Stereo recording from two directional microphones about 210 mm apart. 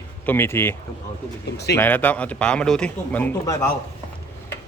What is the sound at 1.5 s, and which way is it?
Speech, 50° left (ahead or behind).